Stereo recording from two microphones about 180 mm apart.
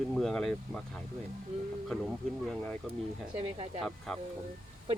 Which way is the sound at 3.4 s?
35° right (ahead or behind).